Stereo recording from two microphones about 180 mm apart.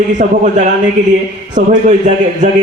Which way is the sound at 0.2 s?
40° right (ahead or behind).